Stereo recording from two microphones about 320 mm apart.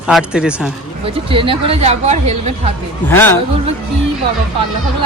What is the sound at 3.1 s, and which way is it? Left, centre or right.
Speech, centre.